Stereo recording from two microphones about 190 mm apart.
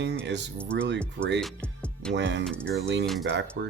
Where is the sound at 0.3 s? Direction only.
65° right (ahead or behind).